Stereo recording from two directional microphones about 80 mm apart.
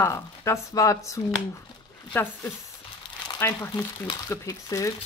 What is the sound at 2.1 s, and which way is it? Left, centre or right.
Speech, left.